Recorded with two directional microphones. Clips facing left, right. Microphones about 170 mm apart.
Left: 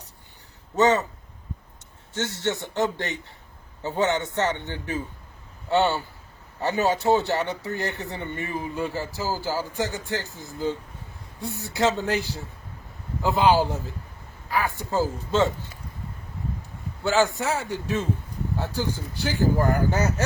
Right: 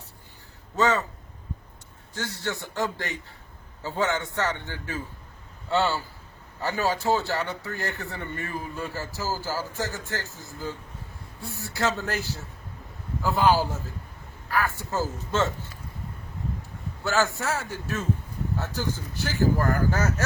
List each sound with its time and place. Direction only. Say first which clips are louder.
0.8 s speech: left 4 dB; 20° left (ahead or behind)
2.1 s speech: left 5 dB; 25° left (ahead or behind)
13.2 s speech: left 2 dB; 20° left (ahead or behind)
17.0 s a man's voice: left 3 dB; 15° left (ahead or behind)